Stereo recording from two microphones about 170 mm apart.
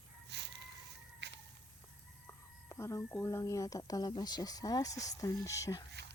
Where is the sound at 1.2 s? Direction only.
90° right.